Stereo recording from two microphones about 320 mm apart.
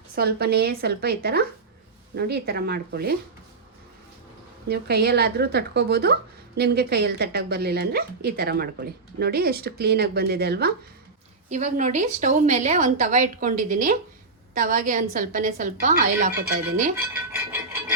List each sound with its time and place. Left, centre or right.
0.2 s a woman's voice: right
4.7 s a woman's voice: right